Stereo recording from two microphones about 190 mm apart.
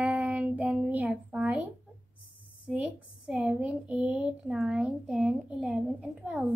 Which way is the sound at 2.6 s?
5° right (ahead or behind).